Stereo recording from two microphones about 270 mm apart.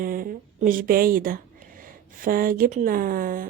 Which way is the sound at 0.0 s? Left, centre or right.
Right.